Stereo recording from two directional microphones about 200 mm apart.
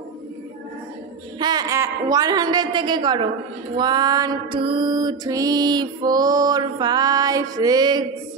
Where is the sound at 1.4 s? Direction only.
20° right (ahead or behind).